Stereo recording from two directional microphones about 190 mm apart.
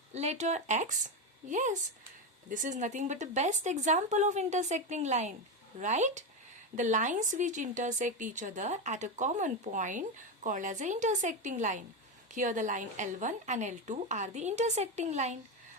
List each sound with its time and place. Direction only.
0.1 s a woman's voice: 35° right (ahead or behind)